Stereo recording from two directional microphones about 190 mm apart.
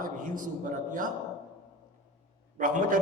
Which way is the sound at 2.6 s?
45° right (ahead or behind).